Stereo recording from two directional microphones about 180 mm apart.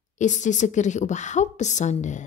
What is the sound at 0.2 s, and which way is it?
A woman's voice, 45° left (ahead or behind).